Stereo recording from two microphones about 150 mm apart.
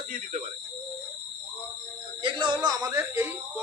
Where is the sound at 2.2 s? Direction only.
35° right (ahead or behind).